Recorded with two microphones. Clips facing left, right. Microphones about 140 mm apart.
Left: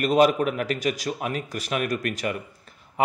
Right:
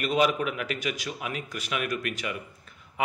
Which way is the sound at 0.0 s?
40° left (ahead or behind).